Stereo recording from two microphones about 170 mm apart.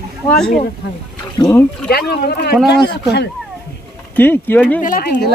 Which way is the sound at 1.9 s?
65° left (ahead or behind).